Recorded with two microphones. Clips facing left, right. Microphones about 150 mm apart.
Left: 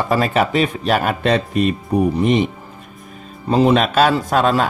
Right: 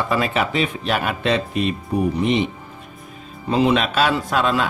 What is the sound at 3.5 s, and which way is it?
Speech, 40° left (ahead or behind).